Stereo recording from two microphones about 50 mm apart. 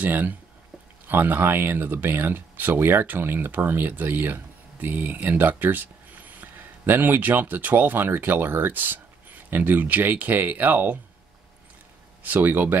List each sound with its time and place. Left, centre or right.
0.0 s speech: right
12.2 s speech: right